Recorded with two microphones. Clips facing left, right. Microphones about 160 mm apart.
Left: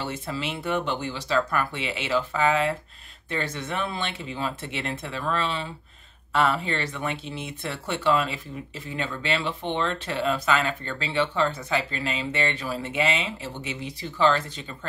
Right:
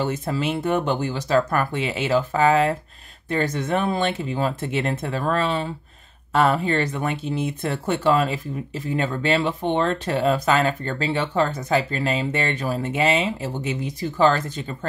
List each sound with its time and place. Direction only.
0.0 s speech: 45° right (ahead or behind)